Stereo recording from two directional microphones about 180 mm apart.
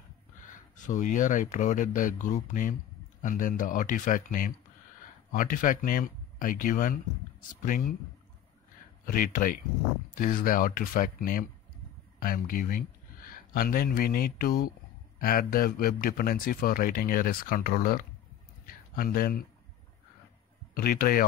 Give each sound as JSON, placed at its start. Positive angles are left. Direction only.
{"t": 0.4, "sound": "a man's voice", "side_deg": 45}
{"t": 9.0, "sound": "a man's voice", "side_deg": 50}
{"t": 20.7, "sound": "speech", "side_deg": 55}